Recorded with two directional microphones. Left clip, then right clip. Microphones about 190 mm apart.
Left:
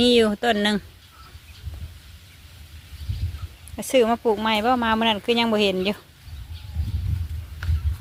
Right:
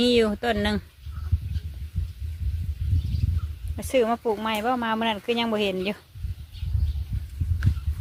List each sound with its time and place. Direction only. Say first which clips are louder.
0.0 s speech: left 3 dB; 5° left (ahead or behind)
3.8 s speech: left 3 dB; 15° left (ahead or behind)